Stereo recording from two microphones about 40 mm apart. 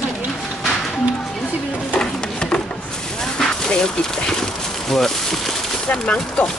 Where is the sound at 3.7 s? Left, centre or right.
Left.